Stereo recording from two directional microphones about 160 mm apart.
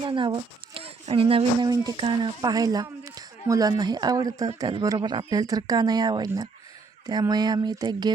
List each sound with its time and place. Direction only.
0.0 s a child's voice: 30° right (ahead or behind)